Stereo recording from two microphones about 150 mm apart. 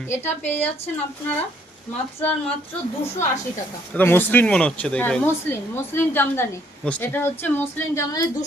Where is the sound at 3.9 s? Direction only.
10° left (ahead or behind).